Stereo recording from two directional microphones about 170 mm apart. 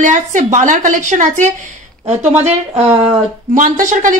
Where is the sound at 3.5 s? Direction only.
50° right (ahead or behind).